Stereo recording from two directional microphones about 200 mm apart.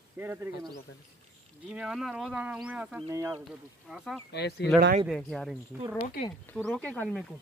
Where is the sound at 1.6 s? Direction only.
5° right (ahead or behind).